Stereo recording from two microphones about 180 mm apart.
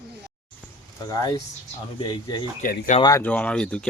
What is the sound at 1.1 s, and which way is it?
Speech, 20° left (ahead or behind).